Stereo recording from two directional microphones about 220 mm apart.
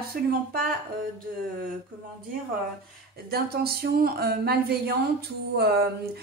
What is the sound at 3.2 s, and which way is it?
A woman's voice, 45° right (ahead or behind).